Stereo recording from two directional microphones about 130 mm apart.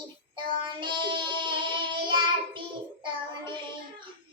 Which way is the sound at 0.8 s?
40° right (ahead or behind).